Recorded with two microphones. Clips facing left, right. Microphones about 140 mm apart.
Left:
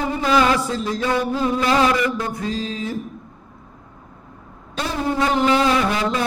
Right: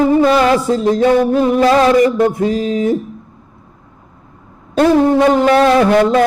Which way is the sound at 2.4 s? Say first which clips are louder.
Right 10 dB; 20° right (ahead or behind).